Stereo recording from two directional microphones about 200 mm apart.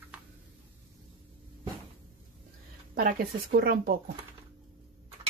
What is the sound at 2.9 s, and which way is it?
Speech, 50° right (ahead or behind).